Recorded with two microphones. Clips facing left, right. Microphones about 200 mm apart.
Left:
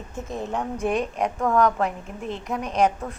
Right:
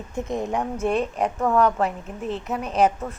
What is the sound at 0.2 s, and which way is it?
A woman's voice, 15° right (ahead or behind).